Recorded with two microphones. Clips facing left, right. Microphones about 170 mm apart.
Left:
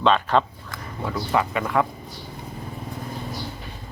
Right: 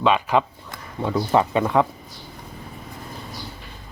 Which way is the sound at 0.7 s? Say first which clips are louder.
Right 4 dB; 25° right (ahead or behind).